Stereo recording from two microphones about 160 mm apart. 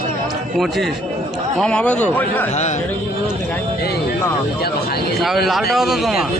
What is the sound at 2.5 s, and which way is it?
Speech, 45° left (ahead or behind).